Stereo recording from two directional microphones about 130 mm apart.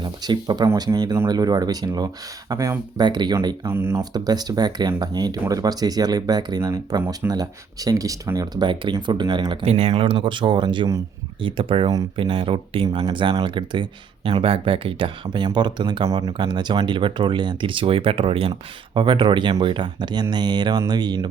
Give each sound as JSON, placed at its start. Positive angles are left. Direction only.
{"t": 0.0, "sound": "speech", "side_deg": -30}
{"t": 4.1, "sound": "speech", "side_deg": -30}
{"t": 9.6, "sound": "speech", "side_deg": -50}